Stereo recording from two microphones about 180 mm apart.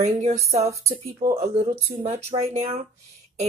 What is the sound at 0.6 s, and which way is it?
Speech, 15° right (ahead or behind).